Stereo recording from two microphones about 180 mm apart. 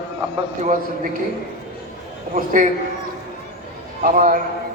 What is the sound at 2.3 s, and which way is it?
Speech, 45° right (ahead or behind).